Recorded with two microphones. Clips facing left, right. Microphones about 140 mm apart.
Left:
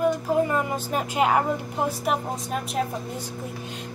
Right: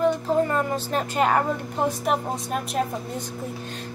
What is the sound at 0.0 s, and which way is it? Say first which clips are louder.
Speech: right 1 dB; 10° left (ahead or behind).